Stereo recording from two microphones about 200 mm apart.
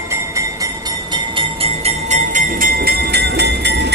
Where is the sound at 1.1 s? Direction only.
25° right (ahead or behind).